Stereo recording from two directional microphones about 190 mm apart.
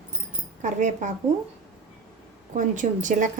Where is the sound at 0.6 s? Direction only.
40° right (ahead or behind).